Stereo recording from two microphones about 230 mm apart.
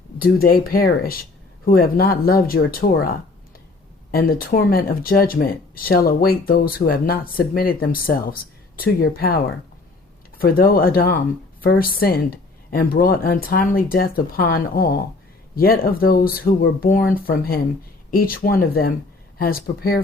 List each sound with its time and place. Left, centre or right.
0.2 s speech: left
4.1 s speech: left